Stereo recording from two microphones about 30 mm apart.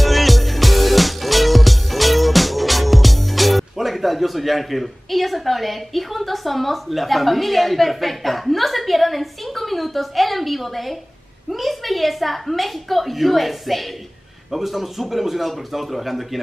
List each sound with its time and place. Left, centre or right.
0.0 s music: centre
11.5 s a woman's voice: centre